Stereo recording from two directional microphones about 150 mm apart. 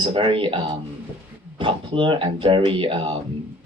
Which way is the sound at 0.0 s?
35° right (ahead or behind).